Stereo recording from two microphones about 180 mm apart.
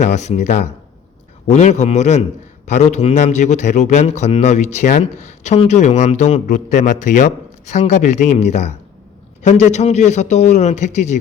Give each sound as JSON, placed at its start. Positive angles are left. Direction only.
{"t": 0.0, "sound": "a man's voice", "side_deg": 40}